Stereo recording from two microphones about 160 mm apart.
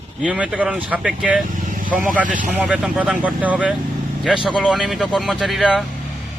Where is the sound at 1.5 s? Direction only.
55° right (ahead or behind).